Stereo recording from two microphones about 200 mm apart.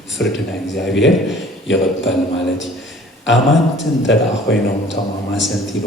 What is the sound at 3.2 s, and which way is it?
A man's voice, 65° left (ahead or behind).